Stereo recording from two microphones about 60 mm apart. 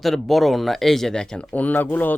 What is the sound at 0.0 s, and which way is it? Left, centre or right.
Speech, centre.